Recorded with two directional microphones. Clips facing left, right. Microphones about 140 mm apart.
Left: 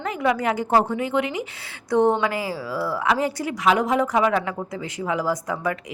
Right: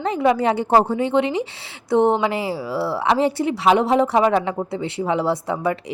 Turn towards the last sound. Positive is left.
turn(degrees=-25)  # may be behind; listen again after turning